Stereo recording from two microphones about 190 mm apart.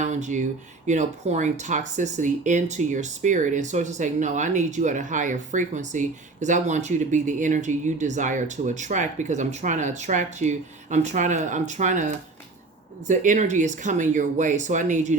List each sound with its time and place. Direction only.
0.0 s speech: 40° right (ahead or behind)